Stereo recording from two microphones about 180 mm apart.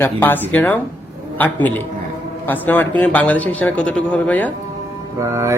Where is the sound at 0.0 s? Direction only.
10° left (ahead or behind).